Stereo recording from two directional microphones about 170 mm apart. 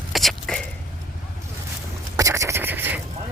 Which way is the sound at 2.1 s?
20° right (ahead or behind).